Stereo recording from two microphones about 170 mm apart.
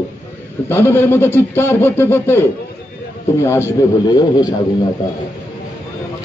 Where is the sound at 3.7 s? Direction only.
20° left (ahead or behind).